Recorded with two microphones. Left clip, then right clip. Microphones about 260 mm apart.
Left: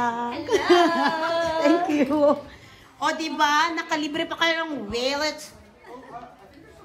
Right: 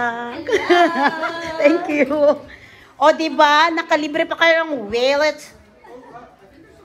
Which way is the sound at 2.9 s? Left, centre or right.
Centre.